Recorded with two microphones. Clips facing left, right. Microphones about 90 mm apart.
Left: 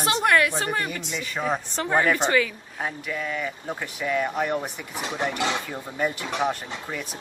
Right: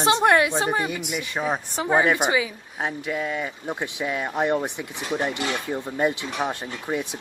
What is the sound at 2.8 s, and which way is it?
Speech, 25° right (ahead or behind).